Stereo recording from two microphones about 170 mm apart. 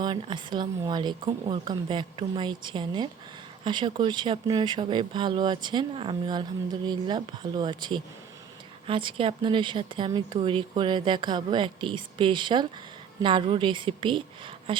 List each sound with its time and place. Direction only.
0.0 s speech: 30° right (ahead or behind)